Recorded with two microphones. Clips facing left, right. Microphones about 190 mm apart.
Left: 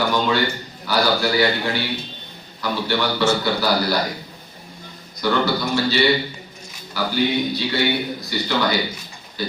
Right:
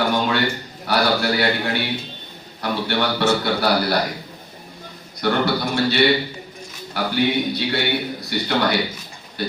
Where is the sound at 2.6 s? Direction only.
60° right (ahead or behind).